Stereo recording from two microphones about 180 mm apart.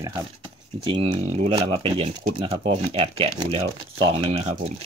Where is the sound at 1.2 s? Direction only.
40° right (ahead or behind).